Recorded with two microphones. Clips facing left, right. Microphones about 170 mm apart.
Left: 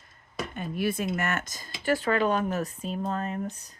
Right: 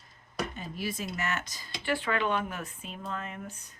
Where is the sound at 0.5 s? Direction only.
60° left (ahead or behind).